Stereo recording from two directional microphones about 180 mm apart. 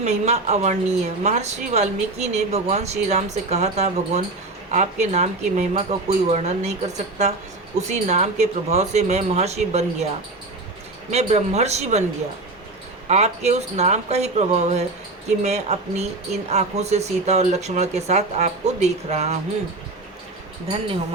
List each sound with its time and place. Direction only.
0.0 s a woman's voice: 35° right (ahead or behind)
11.1 s a woman's voice: 35° right (ahead or behind)
13.1 s a woman's voice: 35° right (ahead or behind)